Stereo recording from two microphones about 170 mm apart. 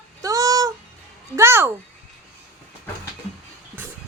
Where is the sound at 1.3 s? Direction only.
15° right (ahead or behind).